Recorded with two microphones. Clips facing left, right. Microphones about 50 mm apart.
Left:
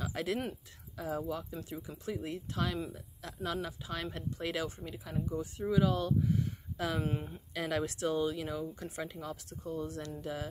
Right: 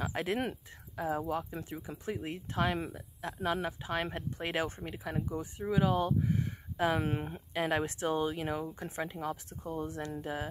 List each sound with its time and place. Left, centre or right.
0.0 s speech: right
5.2 s speech: right
7.0 s speech: right
7.5 s speech: right